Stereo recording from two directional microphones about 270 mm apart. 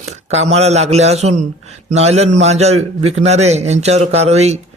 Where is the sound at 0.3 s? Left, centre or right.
Right.